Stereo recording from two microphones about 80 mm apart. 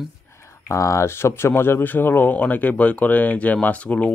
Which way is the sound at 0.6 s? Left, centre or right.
Left.